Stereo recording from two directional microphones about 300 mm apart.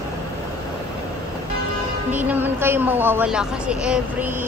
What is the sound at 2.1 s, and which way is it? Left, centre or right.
Speech, centre.